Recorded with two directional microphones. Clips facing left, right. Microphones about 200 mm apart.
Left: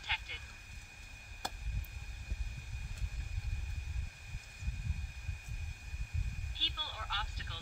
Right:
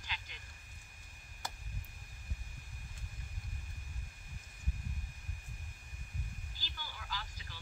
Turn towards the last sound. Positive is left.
turn(degrees=70)  # may be behind; listen again after turning